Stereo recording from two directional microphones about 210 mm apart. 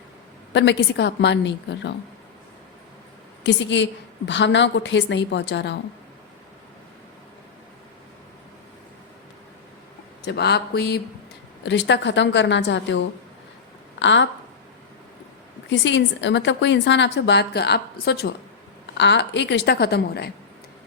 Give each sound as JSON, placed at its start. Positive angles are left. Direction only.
{"t": 0.5, "sound": "a woman's voice", "side_deg": 55}
{"t": 3.4, "sound": "a woman's voice", "side_deg": 60}
{"t": 10.2, "sound": "a woman's voice", "side_deg": 55}
{"t": 14.0, "sound": "a woman's voice", "side_deg": 60}
{"t": 15.7, "sound": "a woman's voice", "side_deg": 60}